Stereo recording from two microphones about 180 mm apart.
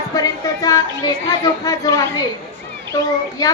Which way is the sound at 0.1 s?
20° left (ahead or behind).